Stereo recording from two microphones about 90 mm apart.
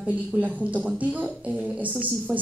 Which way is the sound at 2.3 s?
5° right (ahead or behind).